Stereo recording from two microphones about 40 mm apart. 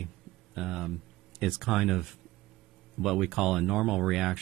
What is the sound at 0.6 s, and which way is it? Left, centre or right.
Speech, centre.